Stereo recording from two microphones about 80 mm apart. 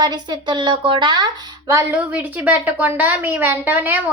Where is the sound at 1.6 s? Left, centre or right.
Right.